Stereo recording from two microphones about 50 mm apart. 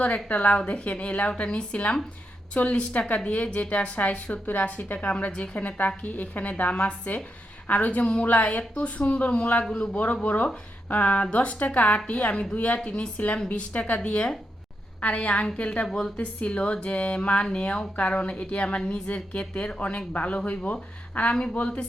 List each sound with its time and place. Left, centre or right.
0.0 s a woman's voice: left